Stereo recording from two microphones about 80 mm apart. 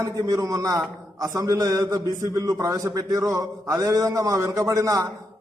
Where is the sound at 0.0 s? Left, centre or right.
Right.